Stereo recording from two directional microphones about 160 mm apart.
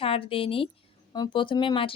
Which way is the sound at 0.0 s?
35° left (ahead or behind).